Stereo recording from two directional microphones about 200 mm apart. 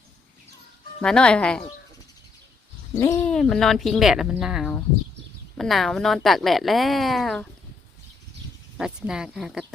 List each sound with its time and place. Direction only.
1.0 s a woman's voice: 5° left (ahead or behind)
3.0 s speech: 15° left (ahead or behind)
3.2 s a woman's voice: centre (ahead or behind)
8.8 s a woman's voice: 5° right (ahead or behind)